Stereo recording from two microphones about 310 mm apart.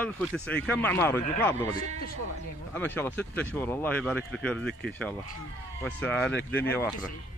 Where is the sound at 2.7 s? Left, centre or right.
Centre.